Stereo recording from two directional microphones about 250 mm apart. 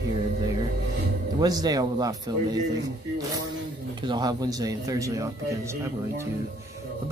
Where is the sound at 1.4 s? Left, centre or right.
Centre.